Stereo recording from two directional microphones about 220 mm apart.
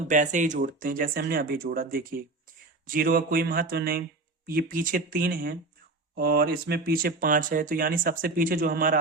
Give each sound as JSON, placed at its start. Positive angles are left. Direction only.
{"t": 0.1, "sound": "speech", "side_deg": -35}